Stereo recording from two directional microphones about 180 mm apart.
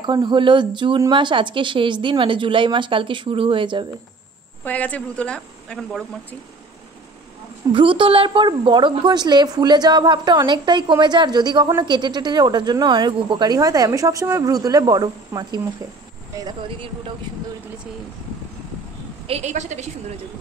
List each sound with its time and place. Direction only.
0.0 s a woman's voice: 25° right (ahead or behind)
4.6 s speech: 10° left (ahead or behind)
7.7 s a woman's voice: 30° right (ahead or behind)
19.2 s a woman's voice: 35° right (ahead or behind)